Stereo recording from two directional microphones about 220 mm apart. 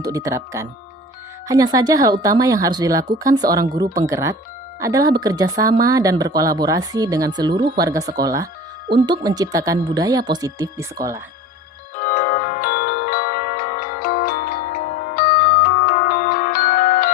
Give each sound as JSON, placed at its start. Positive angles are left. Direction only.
{"t": 0.0, "sound": "speech", "side_deg": -15}
{"t": 11.9, "sound": "chime", "side_deg": 40}